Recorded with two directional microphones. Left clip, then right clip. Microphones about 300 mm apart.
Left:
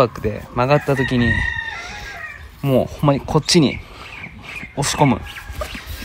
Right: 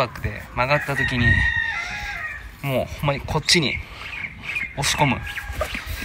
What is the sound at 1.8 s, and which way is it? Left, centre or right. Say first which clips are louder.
Chicken: right 3 dB; centre.